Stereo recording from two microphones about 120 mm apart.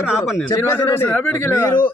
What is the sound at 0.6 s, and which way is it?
A man's voice, 20° left (ahead or behind).